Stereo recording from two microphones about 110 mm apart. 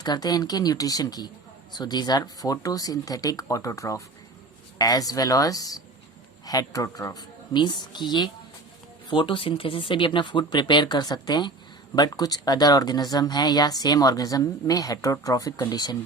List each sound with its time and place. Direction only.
0.0 s speech: 40° left (ahead or behind)